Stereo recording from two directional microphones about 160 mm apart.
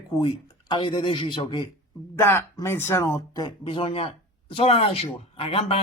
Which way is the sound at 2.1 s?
15° left (ahead or behind).